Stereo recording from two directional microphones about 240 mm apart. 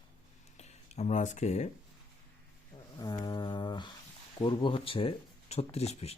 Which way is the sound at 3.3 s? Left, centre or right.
Centre.